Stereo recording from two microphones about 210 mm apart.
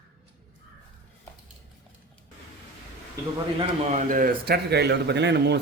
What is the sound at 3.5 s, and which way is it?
A man's voice, 30° right (ahead or behind).